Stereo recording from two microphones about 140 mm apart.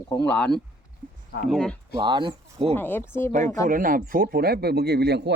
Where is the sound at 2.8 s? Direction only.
15° left (ahead or behind).